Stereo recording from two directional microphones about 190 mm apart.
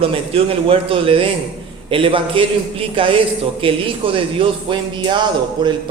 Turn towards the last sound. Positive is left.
turn(degrees=-25)  # may be behind; listen again after turning